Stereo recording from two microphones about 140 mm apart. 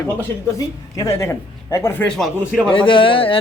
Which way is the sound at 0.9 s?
20° left (ahead or behind).